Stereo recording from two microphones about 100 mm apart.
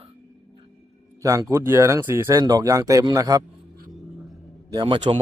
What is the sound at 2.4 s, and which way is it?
A man's voice, 40° right (ahead or behind).